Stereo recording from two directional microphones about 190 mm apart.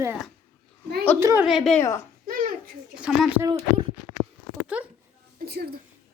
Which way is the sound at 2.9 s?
5° right (ahead or behind).